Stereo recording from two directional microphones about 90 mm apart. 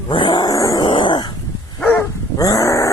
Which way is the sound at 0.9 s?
65° left (ahead or behind).